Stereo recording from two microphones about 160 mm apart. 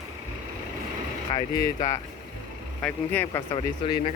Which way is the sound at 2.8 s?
10° left (ahead or behind).